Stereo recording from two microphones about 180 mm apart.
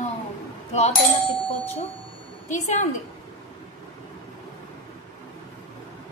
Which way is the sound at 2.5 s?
40° left (ahead or behind).